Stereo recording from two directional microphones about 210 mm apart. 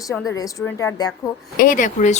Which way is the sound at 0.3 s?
15° left (ahead or behind).